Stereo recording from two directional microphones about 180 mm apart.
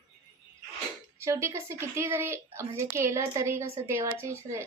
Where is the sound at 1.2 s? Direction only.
15° right (ahead or behind).